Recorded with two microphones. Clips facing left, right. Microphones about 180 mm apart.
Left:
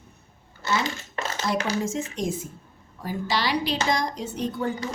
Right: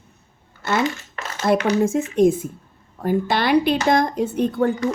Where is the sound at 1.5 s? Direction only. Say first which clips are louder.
Right 9 dB; 55° right (ahead or behind).